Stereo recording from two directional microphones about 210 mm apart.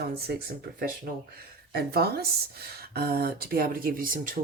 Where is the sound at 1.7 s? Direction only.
50° right (ahead or behind).